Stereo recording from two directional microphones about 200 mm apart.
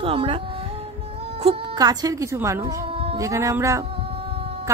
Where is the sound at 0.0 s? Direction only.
25° right (ahead or behind).